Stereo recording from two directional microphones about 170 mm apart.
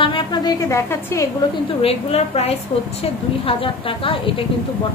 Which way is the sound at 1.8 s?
35° left (ahead or behind).